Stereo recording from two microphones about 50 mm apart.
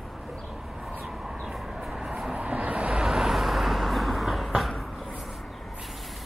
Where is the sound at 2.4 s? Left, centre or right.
Right.